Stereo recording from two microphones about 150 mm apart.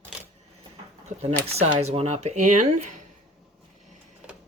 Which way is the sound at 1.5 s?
45° right (ahead or behind).